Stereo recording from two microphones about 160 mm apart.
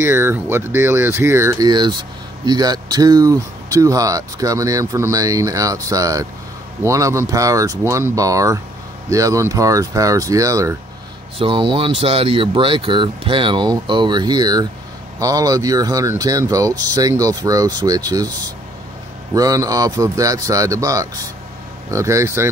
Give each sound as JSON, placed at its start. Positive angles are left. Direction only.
{"t": 0.0, "sound": "speech", "side_deg": -15}
{"t": 11.3, "sound": "speech", "side_deg": -30}